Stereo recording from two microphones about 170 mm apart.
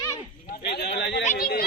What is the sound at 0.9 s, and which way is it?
Speech, 90° left.